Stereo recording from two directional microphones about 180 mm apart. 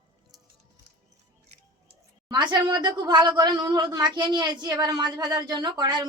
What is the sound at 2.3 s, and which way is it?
A woman's voice, 25° right (ahead or behind).